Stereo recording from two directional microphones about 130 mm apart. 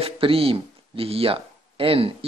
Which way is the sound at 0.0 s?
45° right (ahead or behind).